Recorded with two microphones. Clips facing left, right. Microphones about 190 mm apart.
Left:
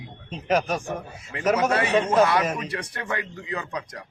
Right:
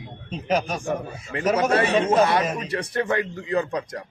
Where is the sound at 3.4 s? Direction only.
40° right (ahead or behind).